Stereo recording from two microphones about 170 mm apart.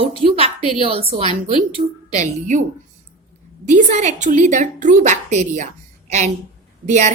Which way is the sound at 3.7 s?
45° right (ahead or behind).